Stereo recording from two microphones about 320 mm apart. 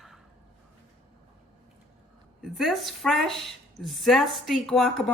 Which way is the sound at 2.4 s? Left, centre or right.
Centre.